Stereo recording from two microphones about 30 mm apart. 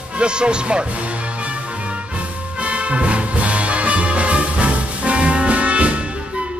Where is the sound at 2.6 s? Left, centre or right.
Right.